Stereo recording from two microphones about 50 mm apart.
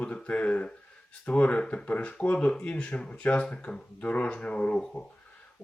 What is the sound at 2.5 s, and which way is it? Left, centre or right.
Speech, centre.